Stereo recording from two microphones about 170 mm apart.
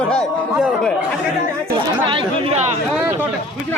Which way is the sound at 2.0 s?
30° right (ahead or behind).